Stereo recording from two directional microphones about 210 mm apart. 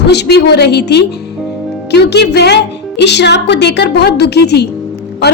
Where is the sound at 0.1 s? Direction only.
50° left (ahead or behind).